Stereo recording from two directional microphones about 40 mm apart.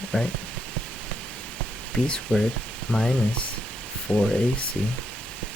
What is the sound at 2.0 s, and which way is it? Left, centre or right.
Speech, left.